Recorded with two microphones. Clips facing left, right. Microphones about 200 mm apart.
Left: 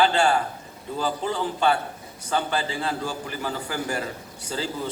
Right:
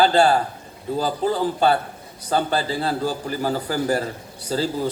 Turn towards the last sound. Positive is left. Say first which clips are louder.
# right 6 dB
turn(degrees=-40)  # may be behind; listen again after turning